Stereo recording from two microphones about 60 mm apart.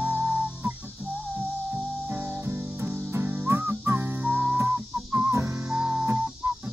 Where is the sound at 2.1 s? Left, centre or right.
Right.